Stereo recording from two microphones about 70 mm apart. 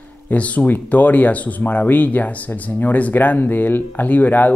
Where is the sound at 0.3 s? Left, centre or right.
Centre.